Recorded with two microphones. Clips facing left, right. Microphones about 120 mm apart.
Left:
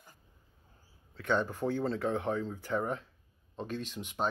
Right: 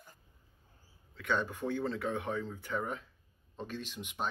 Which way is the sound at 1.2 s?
15° left (ahead or behind).